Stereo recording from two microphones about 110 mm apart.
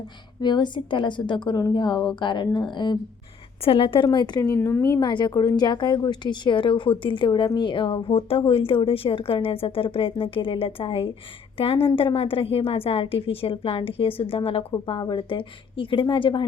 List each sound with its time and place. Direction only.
0.4 s a woman's voice: 45° left (ahead or behind)
3.6 s a woman's voice: 55° left (ahead or behind)
4.4 s speech: 25° left (ahead or behind)
4.9 s a woman's voice: 45° left (ahead or behind)